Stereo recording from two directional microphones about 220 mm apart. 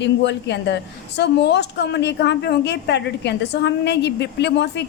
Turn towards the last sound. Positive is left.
turn(degrees=50)  # may be behind; listen again after turning